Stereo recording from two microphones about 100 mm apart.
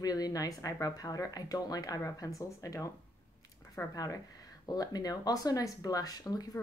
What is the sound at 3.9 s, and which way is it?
Speech, 35° left (ahead or behind).